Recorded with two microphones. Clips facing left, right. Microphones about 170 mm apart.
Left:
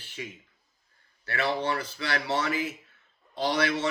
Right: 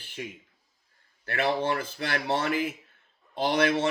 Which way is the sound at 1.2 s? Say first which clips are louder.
Right 2 dB; 50° right (ahead or behind).